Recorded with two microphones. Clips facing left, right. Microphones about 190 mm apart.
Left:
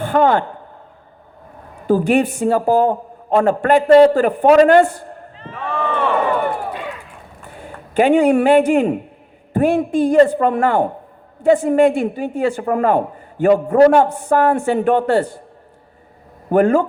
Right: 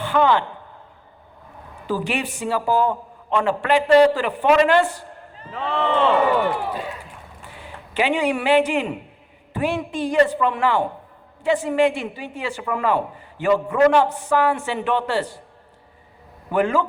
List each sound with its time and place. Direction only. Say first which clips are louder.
0.0 s a man's voice: left 4 dB; 45° left (ahead or behind)
1.9 s a man's voice: left 10 dB; 50° left (ahead or behind)
5.8 s speech: right 1 dB; 20° right (ahead or behind)
6.1 s crowd: left 1 dB; 50° left (ahead or behind)
7.4 s a man's voice: left 6 dB; 50° left (ahead or behind)
16.5 s a man's voice: left 6 dB; 50° left (ahead or behind)